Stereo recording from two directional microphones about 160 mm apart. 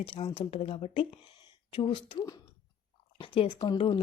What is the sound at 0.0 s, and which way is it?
A woman's voice, 35° left (ahead or behind).